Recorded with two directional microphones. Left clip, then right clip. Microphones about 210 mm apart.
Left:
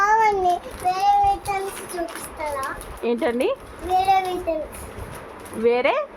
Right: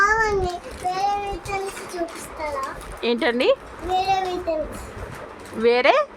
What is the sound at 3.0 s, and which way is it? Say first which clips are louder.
Speech: right 2 dB; 25° right (ahead or behind).